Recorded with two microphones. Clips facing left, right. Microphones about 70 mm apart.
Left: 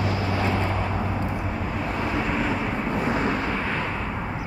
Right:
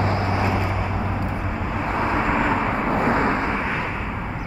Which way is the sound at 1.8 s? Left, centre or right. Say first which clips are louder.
Right 5 dB; right.